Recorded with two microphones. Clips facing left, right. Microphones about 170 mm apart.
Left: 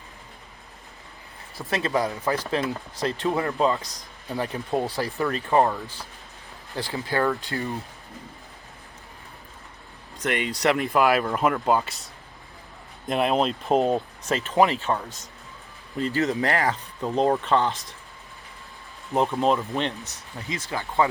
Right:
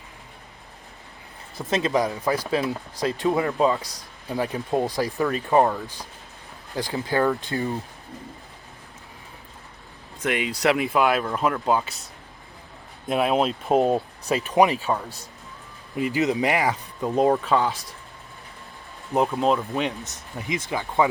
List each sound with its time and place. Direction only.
1.5 s speech: 20° right (ahead or behind)
6.7 s speech: 15° right (ahead or behind)
10.2 s speech: 5° right (ahead or behind)
13.1 s speech: 5° right (ahead or behind)
14.3 s speech: 15° right (ahead or behind)
19.1 s speech: centre (ahead or behind)
20.7 s speech: 15° right (ahead or behind)